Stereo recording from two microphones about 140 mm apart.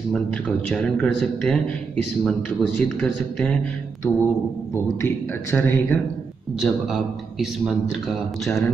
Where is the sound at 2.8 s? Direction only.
5° left (ahead or behind).